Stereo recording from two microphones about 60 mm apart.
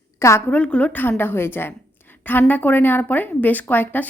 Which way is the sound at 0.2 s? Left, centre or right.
Left.